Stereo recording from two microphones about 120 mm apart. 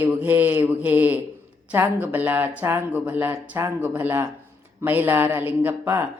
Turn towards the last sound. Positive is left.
turn(degrees=-15)  # may be behind; listen again after turning